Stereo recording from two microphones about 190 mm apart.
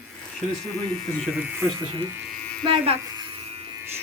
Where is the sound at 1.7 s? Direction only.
20° right (ahead or behind).